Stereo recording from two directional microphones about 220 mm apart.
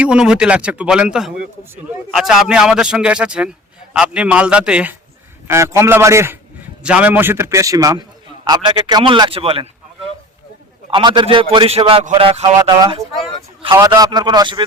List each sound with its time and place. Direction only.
0.0 s a man's voice: 5° right (ahead or behind); by 14.6 s 20° right (ahead or behind)